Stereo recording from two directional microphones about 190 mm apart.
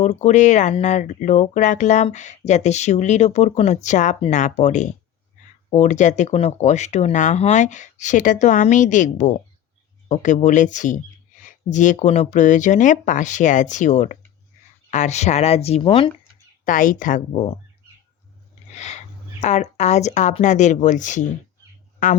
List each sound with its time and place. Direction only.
0.0 s speech: 35° left (ahead or behind)
16.6 s speech: 45° left (ahead or behind)
18.7 s a sound: 35° left (ahead or behind)
19.4 s speech: 40° left (ahead or behind)